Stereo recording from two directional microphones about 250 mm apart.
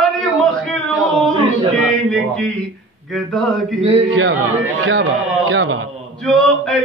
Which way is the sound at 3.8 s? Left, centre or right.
Right.